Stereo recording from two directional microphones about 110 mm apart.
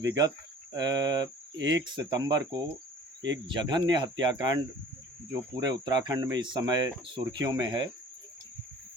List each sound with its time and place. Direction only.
0.1 s speech: 35° right (ahead or behind)